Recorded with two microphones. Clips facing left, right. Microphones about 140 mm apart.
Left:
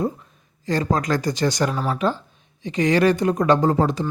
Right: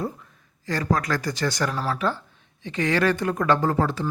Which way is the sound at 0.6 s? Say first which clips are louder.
Left 3 dB; 20° left (ahead or behind).